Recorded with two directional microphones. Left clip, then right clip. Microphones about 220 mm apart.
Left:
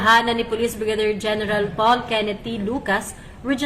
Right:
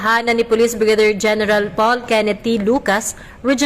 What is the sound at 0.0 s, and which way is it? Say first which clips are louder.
A woman's voice: right 1 dB; 45° right (ahead or behind).